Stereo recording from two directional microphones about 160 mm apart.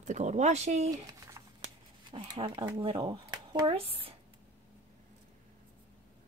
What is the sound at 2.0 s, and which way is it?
Speech, 30° right (ahead or behind).